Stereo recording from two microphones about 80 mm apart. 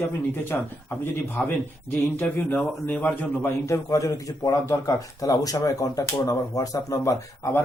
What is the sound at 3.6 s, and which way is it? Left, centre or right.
Speech, left.